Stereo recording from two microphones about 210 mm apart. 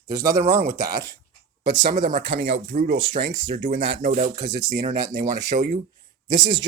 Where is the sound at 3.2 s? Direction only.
30° right (ahead or behind).